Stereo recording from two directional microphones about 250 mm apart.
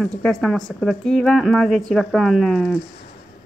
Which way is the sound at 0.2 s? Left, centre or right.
Centre.